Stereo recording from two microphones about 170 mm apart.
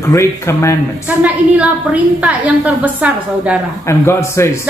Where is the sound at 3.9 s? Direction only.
15° left (ahead or behind).